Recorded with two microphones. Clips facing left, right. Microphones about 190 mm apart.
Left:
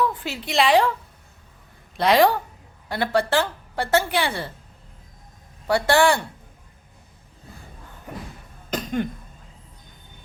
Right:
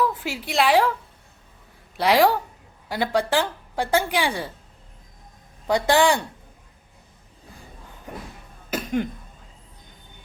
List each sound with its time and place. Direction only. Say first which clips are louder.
0.0 s a woman's voice: even; 5° right (ahead or behind)
2.0 s a woman's voice: left 1 dB; 10° right (ahead or behind)
5.6 s a woman's voice: even; 15° right (ahead or behind)
8.7 s cough: even; 10° right (ahead or behind)